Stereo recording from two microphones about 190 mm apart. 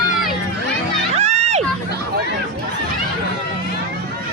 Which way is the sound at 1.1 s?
35° right (ahead or behind).